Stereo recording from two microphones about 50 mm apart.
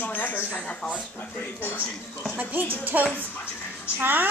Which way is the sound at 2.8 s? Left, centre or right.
Right.